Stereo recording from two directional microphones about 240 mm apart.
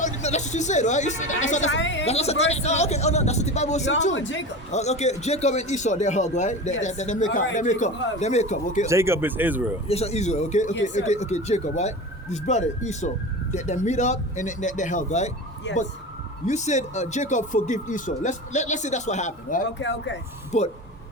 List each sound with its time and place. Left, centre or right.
0.0 s speech: left
1.7 s a woman's voice: left
2.0 s speech: left
4.1 s a woman's voice: left
4.7 s speech: left
8.9 s speech: centre
9.8 s speech: left
15.7 s a woman's voice: left
16.5 s speech: left
19.8 s a woman's voice: left
20.5 s speech: left